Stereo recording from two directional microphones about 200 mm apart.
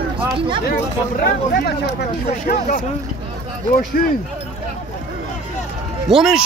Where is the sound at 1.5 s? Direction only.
50° left (ahead or behind).